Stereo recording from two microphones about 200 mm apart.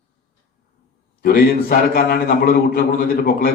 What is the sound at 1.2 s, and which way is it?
A man's voice, 45° left (ahead or behind).